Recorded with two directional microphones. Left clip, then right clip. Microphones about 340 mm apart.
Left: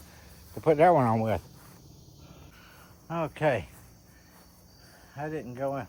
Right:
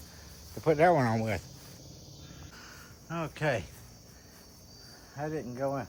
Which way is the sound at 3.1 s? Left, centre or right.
Centre.